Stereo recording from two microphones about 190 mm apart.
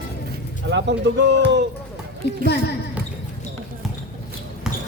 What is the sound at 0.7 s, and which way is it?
Speech, 70° right (ahead or behind).